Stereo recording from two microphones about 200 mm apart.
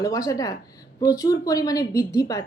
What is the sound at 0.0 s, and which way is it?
A woman's voice, 15° left (ahead or behind).